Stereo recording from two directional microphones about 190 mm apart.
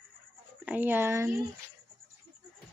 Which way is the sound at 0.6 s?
10° right (ahead or behind).